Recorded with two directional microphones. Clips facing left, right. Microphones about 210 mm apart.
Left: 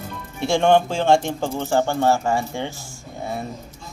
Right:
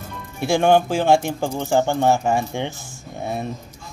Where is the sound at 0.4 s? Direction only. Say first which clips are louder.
Even; 5° right (ahead or behind).